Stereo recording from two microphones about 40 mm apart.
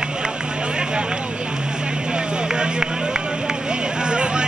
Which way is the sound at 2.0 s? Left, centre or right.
Right.